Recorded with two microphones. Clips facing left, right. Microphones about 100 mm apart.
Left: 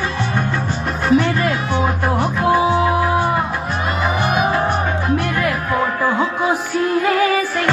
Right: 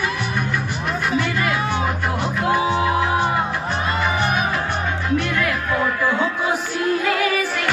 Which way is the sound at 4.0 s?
20° left (ahead or behind).